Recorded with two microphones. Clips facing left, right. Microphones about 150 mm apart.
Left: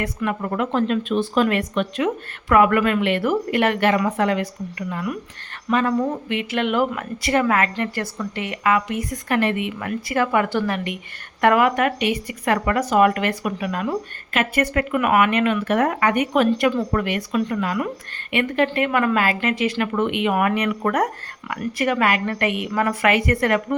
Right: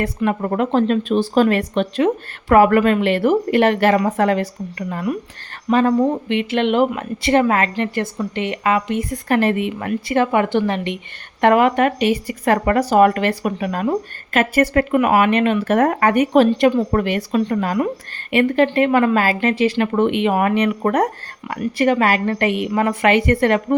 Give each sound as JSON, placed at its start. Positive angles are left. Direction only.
{"t": 0.0, "sound": "speech", "side_deg": -30}